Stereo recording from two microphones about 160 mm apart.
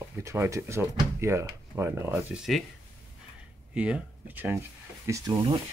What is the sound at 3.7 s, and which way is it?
Speech, 5° right (ahead or behind).